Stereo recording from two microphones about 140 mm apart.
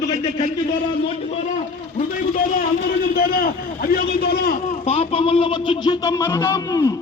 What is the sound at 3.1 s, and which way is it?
A man's voice, 90° left.